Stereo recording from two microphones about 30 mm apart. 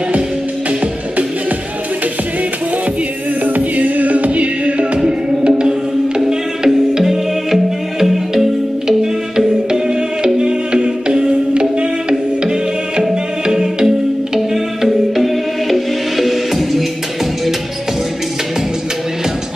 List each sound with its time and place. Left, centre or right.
3.4 s music: right
4.9 s music: right
7.5 s music: centre
8.8 s music: centre
14.3 s music: centre